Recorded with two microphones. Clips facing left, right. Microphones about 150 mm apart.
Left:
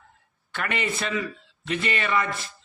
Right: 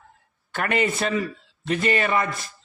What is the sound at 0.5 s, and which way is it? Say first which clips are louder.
A man's voice: right 5 dB; 45° right (ahead or behind).